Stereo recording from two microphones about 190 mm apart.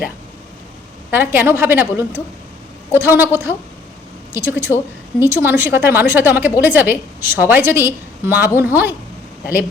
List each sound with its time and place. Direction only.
1.1 s a woman's voice: 10° right (ahead or behind)